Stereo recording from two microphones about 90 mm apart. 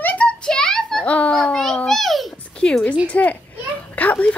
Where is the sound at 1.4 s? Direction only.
10° left (ahead or behind).